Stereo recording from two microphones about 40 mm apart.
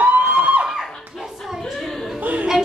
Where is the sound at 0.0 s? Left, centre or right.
Right.